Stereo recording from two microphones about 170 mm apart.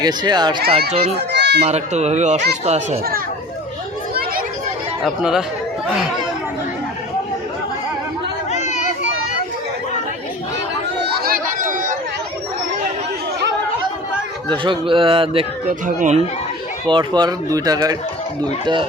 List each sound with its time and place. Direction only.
0.0 s speech: 25° right (ahead or behind)
1.3 s children playing: 85° right
1.6 s speech: 40° right (ahead or behind)
5.0 s speech: centre (ahead or behind)
8.5 s children playing: 45° left (ahead or behind)
11.0 s chatter: 65° right (ahead or behind)
14.5 s speech: 30° right (ahead or behind)
16.0 s speech: 45° right (ahead or behind)
16.8 s speech: 25° right (ahead or behind)